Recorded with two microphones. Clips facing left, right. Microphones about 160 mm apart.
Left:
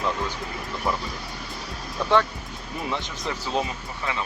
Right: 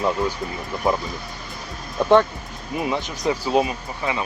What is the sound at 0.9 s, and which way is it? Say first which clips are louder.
Speech: right 6 dB; 15° right (ahead or behind).